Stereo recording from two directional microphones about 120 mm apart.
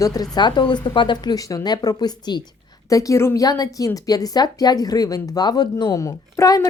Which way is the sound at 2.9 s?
25° left (ahead or behind).